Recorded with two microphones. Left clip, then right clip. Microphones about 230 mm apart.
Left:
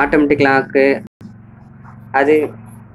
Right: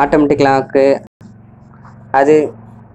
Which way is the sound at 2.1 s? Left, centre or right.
Right.